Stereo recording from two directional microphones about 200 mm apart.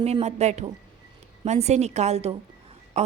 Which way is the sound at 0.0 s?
30° right (ahead or behind).